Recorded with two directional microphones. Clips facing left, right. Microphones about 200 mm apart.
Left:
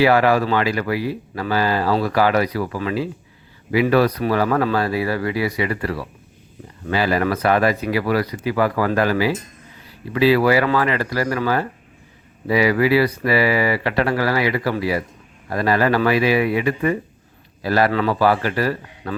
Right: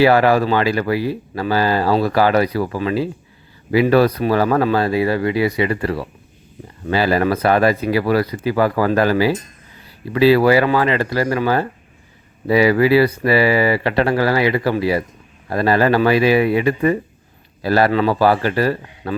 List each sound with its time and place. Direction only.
0.0 s speech: 30° right (ahead or behind)